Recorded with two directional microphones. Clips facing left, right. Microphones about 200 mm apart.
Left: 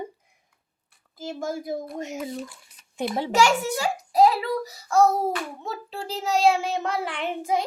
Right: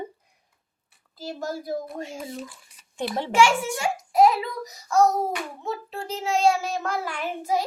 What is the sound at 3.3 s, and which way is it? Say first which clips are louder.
A child's voice: right 1 dB; 40° left (ahead or behind).